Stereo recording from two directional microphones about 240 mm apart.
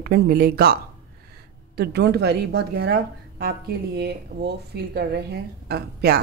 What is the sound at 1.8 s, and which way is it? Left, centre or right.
A woman's voice, right.